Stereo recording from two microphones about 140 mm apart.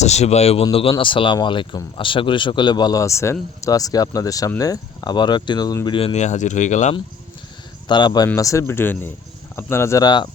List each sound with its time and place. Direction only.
0.0 s speech: 50° left (ahead or behind); by 6.0 s 30° left (ahead or behind)
6.1 s speech: 55° left (ahead or behind)
7.9 s speech: 30° left (ahead or behind)